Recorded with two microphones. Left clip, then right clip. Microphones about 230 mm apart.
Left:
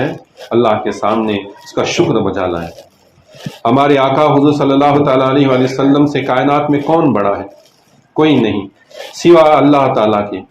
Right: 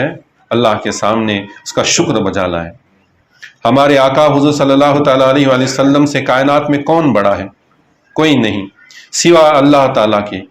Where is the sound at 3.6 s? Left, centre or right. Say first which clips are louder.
Right 2 dB; right.